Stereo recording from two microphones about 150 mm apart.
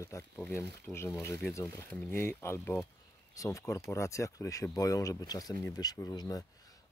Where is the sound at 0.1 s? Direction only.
20° left (ahead or behind).